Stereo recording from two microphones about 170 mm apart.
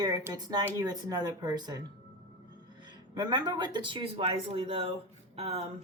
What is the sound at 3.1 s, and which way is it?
A woman's voice, 25° right (ahead or behind).